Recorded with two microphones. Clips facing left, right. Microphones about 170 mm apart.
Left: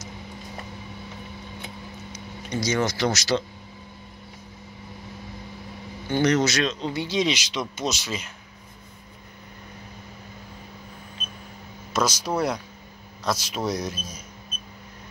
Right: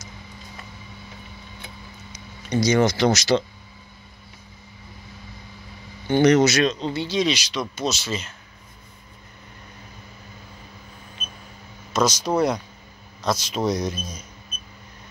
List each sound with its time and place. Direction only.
2.1 s speech: 15° right (ahead or behind)
6.0 s speech: 20° right (ahead or behind); by 6.9 s centre (ahead or behind)
6.9 s speech: 15° left (ahead or behind)
11.9 s speech: 5° left (ahead or behind)